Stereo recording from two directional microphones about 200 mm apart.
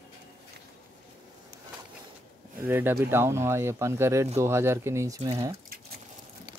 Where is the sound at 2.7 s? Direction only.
10° right (ahead or behind).